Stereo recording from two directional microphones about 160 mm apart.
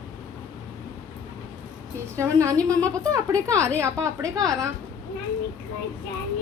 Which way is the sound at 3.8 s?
20° right (ahead or behind).